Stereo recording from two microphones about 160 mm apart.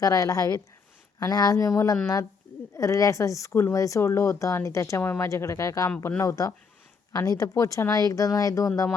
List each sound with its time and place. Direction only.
0.0 s speech: 20° left (ahead or behind)